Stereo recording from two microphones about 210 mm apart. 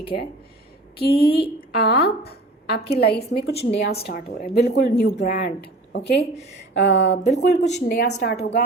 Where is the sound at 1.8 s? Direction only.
50° left (ahead or behind).